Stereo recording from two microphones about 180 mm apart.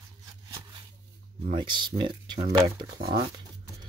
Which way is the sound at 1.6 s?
25° right (ahead or behind).